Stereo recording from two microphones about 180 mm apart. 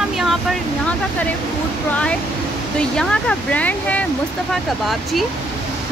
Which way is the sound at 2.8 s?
5° left (ahead or behind).